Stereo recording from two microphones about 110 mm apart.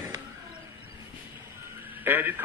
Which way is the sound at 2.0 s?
20° right (ahead or behind).